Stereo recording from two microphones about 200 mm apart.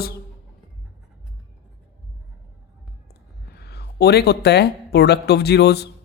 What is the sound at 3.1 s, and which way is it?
Speech, 55° left (ahead or behind).